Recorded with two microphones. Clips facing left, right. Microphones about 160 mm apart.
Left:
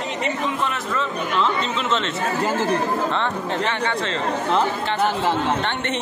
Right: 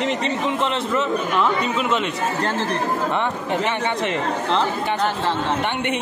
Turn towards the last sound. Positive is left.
turn(degrees=10)  # may be behind; listen again after turning